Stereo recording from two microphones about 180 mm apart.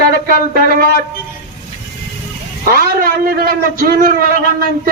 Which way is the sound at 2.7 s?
55° right (ahead or behind).